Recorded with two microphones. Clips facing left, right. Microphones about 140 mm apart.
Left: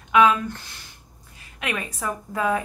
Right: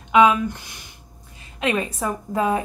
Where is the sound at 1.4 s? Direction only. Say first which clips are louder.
Right 7 dB; 25° right (ahead or behind).